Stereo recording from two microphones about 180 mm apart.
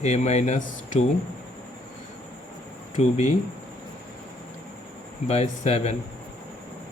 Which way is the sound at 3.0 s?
40° left (ahead or behind).